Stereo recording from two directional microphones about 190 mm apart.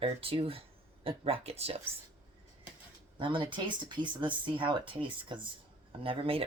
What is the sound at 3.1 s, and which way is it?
Speech, 25° right (ahead or behind).